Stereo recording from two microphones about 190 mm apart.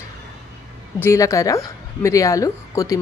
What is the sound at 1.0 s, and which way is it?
A woman's voice, 15° left (ahead or behind).